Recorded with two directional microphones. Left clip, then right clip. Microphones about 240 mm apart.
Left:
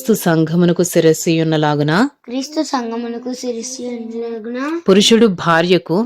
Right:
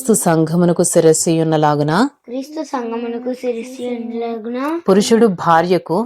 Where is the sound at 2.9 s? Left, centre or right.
Left.